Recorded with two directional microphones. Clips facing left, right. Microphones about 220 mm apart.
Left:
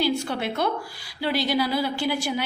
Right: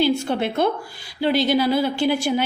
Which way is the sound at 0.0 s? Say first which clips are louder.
Right 5 dB; 25° right (ahead or behind).